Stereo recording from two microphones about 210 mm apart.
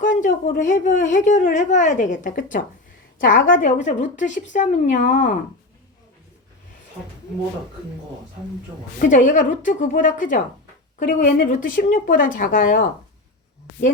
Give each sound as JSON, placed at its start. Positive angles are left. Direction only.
{"t": 0.0, "sound": "a woman's voice", "side_deg": 40}
{"t": 9.0, "sound": "speech", "side_deg": 40}